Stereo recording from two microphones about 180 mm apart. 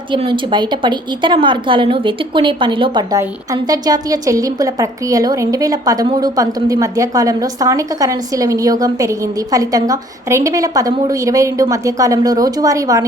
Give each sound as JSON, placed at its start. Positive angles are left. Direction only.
{"t": 0.1, "sound": "a woman's voice", "side_deg": -25}